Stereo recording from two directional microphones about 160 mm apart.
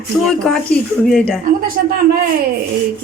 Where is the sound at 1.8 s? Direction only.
80° right.